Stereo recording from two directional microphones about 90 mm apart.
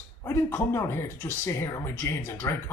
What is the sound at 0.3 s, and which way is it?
Speech, 30° left (ahead or behind).